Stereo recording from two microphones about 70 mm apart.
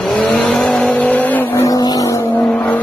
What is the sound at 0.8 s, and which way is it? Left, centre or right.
Vehicle, left.